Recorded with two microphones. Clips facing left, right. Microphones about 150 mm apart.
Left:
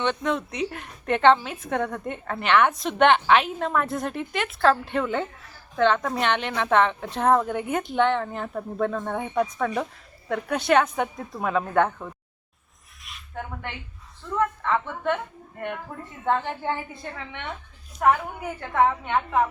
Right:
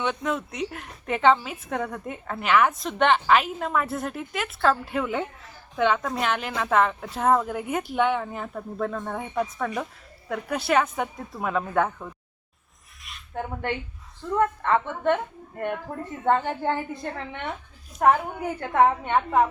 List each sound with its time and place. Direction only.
0.0 s a woman's voice: 5° right (ahead or behind)
13.0 s a sound: centre (ahead or behind)
13.3 s a woman's voice: 45° right (ahead or behind)
16.2 s a woman's voice: 45° right (ahead or behind)
18.7 s a woman's voice: 45° right (ahead or behind)